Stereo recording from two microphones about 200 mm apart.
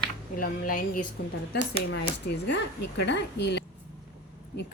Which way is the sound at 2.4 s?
60° left (ahead or behind).